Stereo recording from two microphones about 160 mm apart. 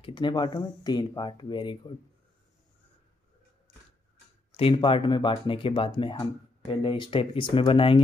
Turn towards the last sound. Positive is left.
turn(degrees=35)  # may be behind; listen again after turning